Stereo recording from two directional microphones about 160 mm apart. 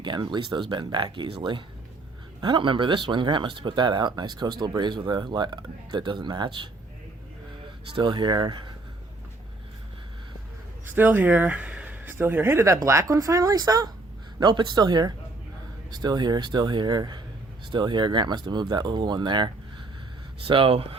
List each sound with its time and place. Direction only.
0.0 s speech: 30° right (ahead or behind)
7.9 s speech: 30° right (ahead or behind)
10.8 s speech: 10° right (ahead or behind); by 20.8 s 35° right (ahead or behind)